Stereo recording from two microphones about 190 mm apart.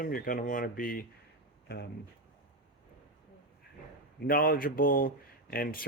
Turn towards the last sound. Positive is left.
turn(degrees=50)  # may be behind; listen again after turning